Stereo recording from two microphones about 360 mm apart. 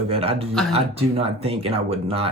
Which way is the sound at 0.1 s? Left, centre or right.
Centre.